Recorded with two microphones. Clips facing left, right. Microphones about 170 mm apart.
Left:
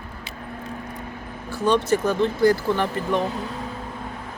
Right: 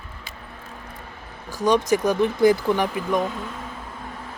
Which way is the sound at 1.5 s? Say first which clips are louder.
Right 1 dB; 15° right (ahead or behind).